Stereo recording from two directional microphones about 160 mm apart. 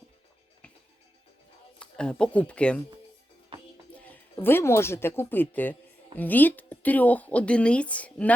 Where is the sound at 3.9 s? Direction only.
10° left (ahead or behind).